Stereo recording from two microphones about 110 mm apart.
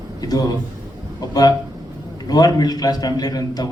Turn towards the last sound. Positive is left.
turn(degrees=35)  # may be behind; listen again after turning